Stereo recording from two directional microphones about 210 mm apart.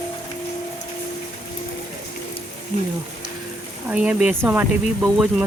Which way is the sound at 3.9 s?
5° right (ahead or behind).